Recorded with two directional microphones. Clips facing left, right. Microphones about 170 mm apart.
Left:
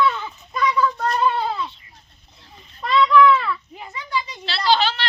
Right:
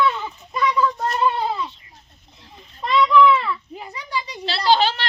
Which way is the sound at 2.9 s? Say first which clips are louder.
Even; centre (ahead or behind).